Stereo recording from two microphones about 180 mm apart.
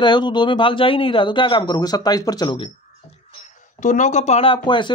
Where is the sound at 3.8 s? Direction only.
45° left (ahead or behind); by 4.9 s 25° left (ahead or behind).